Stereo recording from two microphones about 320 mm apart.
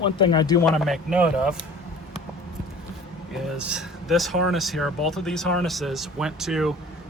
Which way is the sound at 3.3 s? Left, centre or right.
Centre.